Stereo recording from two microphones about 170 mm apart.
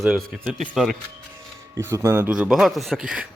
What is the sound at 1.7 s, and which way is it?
A man's voice, 15° right (ahead or behind).